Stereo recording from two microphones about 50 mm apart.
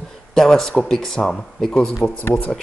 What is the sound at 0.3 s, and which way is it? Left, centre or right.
Speech, centre.